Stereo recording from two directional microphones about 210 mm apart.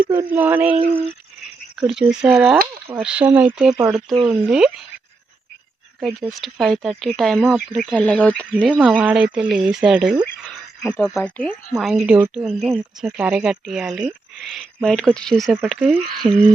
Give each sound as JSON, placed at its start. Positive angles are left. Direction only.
{"t": 0.1, "sound": "speech", "side_deg": -10}
{"t": 1.9, "sound": "speech", "side_deg": -5}
{"t": 6.0, "sound": "speech", "side_deg": 0}